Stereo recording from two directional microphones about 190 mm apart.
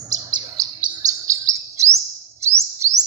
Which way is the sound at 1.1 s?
15° right (ahead or behind).